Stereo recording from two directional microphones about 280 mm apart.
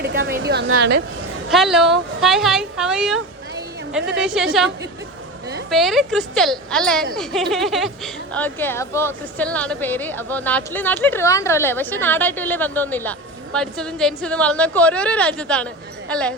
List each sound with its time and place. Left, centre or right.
0.0 s a woman's voice: right
1.5 s speech: centre
4.2 s speech: centre
5.7 s speech: centre